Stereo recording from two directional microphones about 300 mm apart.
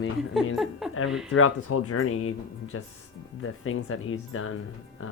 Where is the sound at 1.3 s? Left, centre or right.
Left.